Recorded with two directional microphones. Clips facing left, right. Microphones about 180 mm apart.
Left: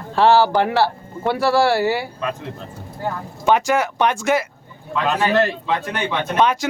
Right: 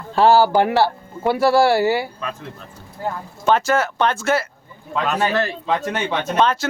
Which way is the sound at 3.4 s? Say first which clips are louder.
Even; 15° left (ahead or behind).